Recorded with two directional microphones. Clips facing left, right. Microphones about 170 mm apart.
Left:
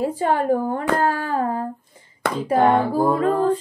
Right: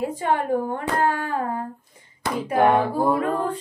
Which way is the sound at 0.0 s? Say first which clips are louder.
Left 3 dB; 30° left (ahead or behind).